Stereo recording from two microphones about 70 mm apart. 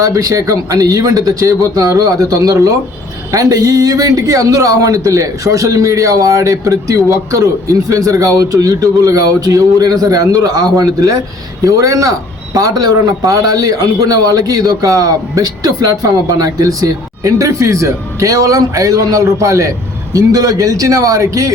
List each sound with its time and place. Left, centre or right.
0.0 s a man's voice: right
12.5 s a man's voice: right
20.1 s a man's voice: right